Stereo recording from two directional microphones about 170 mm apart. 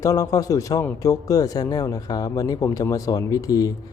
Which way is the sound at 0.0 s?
20° left (ahead or behind).